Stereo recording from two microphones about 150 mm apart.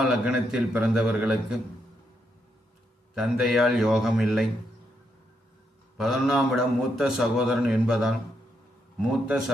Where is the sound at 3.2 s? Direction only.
Centre (ahead or behind).